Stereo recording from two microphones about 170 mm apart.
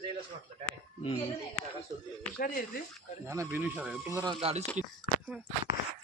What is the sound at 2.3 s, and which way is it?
Speech, 60° left (ahead or behind).